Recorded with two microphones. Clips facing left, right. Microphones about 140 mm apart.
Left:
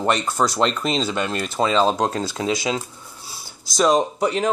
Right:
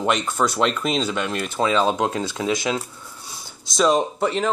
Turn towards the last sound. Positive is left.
turn(degrees=0)  # may be behind; listen again after turning